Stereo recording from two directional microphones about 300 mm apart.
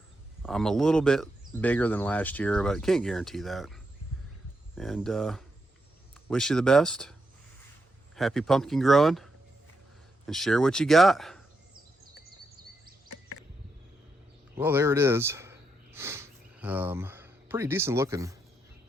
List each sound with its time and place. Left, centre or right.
0.4 s speech: centre
14.5 s speech: centre